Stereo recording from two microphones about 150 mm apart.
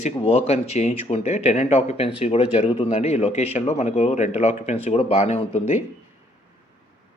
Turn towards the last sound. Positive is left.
turn(degrees=50)  # may be behind; listen again after turning